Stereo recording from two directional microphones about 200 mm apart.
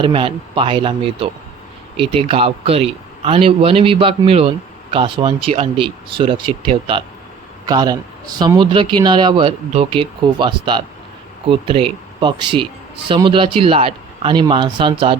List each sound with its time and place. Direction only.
0.0 s speech: 25° right (ahead or behind)